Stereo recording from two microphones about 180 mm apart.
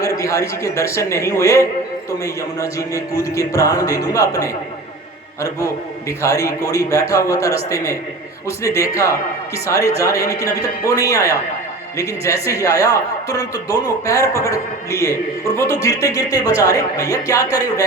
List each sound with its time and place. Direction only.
0.0 s speech: 15° left (ahead or behind)